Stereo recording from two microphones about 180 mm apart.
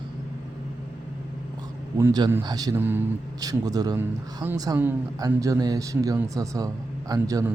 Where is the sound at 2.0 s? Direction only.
20° right (ahead or behind).